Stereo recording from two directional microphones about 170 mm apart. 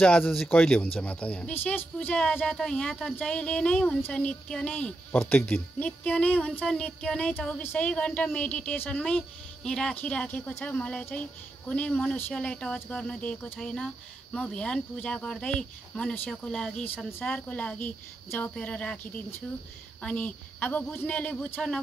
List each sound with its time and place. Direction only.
0.0 s speech: 5° left (ahead or behind)